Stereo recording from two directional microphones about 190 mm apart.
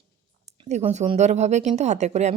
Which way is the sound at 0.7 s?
35° right (ahead or behind).